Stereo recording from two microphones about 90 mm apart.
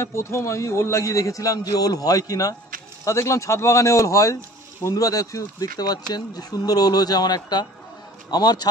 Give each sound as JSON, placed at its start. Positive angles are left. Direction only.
{"t": 0.0, "sound": "a man's voice", "side_deg": 30}